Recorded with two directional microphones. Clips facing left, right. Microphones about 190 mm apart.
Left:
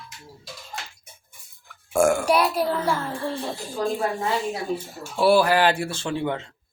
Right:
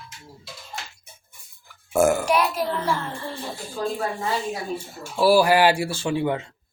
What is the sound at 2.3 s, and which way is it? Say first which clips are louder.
Speech: left 1 dB; 35° left (ahead or behind).